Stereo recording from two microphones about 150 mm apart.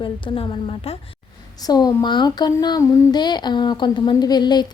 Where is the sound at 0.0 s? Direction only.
40° left (ahead or behind).